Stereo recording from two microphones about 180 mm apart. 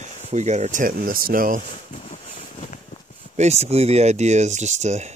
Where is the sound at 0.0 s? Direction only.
40° right (ahead or behind).